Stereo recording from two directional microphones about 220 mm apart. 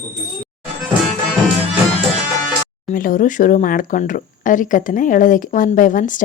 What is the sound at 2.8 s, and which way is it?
Speech, 40° left (ahead or behind).